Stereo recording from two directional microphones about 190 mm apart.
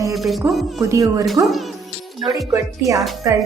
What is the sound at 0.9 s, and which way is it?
Speech, 15° right (ahead or behind).